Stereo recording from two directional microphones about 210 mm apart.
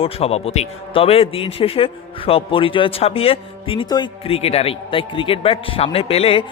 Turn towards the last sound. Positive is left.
turn(degrees=30)  # may be behind; listen again after turning